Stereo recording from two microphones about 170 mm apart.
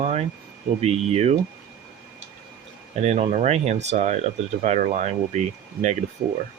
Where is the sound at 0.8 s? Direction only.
40° right (ahead or behind).